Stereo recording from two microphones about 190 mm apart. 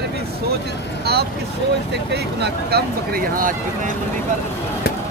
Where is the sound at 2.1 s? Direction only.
60° right (ahead or behind).